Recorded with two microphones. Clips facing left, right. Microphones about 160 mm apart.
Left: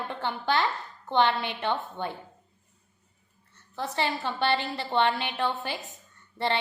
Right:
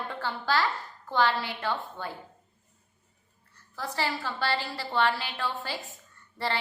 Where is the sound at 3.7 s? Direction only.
25° left (ahead or behind).